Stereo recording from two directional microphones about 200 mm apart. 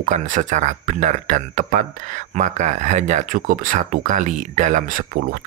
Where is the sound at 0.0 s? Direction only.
40° right (ahead or behind).